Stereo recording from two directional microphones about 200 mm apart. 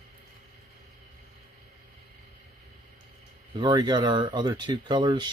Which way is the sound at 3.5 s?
20° right (ahead or behind).